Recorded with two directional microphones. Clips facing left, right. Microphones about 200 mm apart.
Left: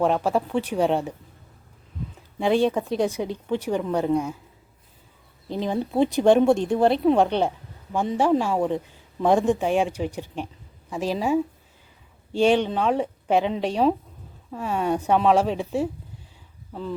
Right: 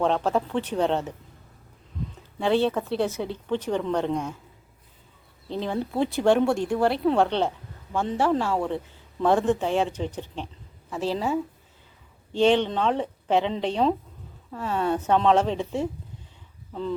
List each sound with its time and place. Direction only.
0.0 s speech: 10° left (ahead or behind)
2.4 s speech: 15° left (ahead or behind)
5.5 s speech: 15° left (ahead or behind)